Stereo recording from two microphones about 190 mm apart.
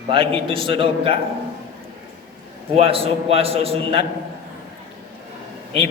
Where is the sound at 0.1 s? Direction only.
25° right (ahead or behind).